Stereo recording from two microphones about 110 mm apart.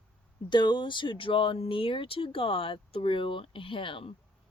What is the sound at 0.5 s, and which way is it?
Speech, 45° left (ahead or behind).